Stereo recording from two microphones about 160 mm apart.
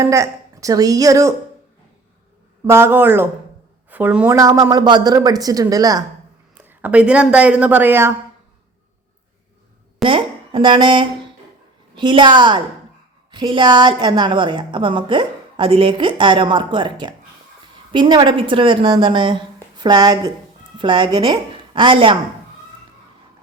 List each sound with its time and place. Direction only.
0.0 s a woman's voice: 20° right (ahead or behind)
2.6 s a woman's voice: 15° right (ahead or behind)
6.7 s a woman's voice: 10° right (ahead or behind)
10.0 s a woman's voice: 30° right (ahead or behind)